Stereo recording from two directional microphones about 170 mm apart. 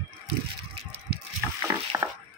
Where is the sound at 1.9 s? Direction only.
15° right (ahead or behind).